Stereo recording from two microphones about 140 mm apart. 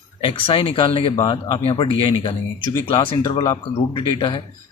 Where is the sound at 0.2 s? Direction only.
40° left (ahead or behind).